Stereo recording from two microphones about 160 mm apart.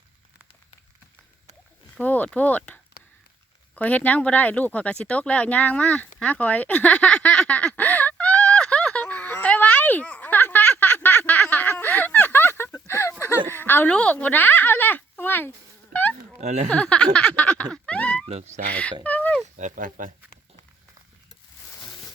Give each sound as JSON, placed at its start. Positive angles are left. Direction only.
{"t": 2.0, "sound": "speech", "side_deg": 10}
{"t": 3.8, "sound": "speech", "side_deg": 10}
{"t": 6.1, "sound": "giggle", "side_deg": 10}
{"t": 13.5, "sound": "a sound", "side_deg": 15}
{"t": 16.4, "sound": "speech", "side_deg": -45}
{"t": 16.6, "sound": "speech", "side_deg": 5}
{"t": 18.3, "sound": "speech", "side_deg": -45}
{"t": 18.7, "sound": "speech", "side_deg": 10}
{"t": 19.0, "sound": "a sound", "side_deg": 10}
{"t": 19.5, "sound": "speech", "side_deg": -55}